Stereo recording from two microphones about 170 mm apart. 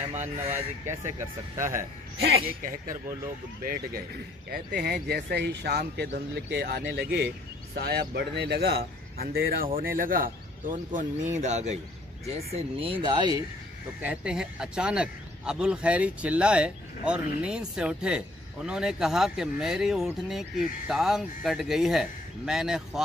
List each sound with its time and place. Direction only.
0.5 s speech: 15° right (ahead or behind)
2.1 s speech: 55° right (ahead or behind)
4.5 s speech: 65° right (ahead or behind); by 7.2 s 85° right
7.8 s speech: 75° right (ahead or behind); by 11.8 s 40° right (ahead or behind)
12.5 s speech: 30° right (ahead or behind)
14.0 s a man's voice: 5° right (ahead or behind)